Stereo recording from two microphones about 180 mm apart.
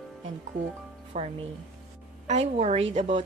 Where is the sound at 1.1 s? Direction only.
40° right (ahead or behind).